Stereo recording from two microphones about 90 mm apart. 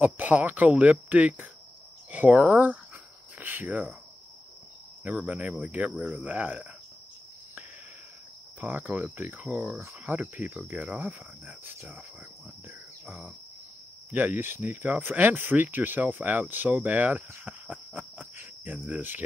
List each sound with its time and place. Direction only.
0.0 s speech: 20° right (ahead or behind)
5.0 s speech: 15° right (ahead or behind)
8.5 s speech: 20° right (ahead or behind)
12.6 s cricket: 15° right (ahead or behind)
14.1 s speech: 20° right (ahead or behind)